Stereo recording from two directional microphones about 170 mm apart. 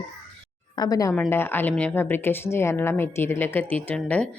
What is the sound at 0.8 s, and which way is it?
A woman's voice, 20° left (ahead or behind).